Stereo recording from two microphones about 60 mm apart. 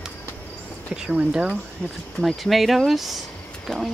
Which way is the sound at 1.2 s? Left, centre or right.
Centre.